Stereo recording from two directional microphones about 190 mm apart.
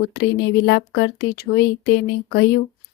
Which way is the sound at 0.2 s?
60° left (ahead or behind).